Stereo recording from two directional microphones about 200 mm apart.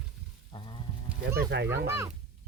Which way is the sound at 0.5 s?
25° left (ahead or behind).